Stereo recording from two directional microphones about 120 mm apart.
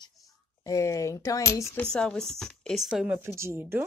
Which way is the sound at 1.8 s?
5° left (ahead or behind).